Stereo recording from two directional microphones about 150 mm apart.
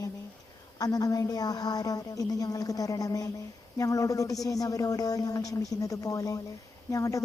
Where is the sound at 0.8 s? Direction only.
25° left (ahead or behind).